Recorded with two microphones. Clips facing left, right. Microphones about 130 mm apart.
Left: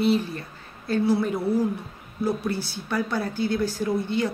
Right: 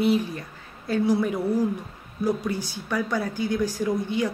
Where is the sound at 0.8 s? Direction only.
15° right (ahead or behind).